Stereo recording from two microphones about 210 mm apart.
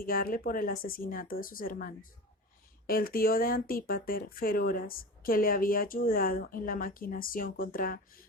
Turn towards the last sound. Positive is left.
turn(degrees=45)  # may be behind; listen again after turning